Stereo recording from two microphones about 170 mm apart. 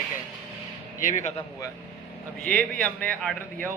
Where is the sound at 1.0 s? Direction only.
45° left (ahead or behind).